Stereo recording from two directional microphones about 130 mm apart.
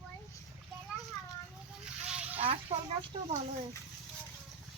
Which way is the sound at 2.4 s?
45° right (ahead or behind).